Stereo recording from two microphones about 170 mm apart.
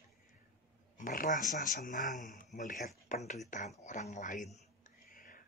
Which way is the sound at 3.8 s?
45° left (ahead or behind).